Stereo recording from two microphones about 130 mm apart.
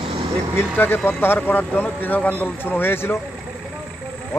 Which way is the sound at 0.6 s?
15° left (ahead or behind).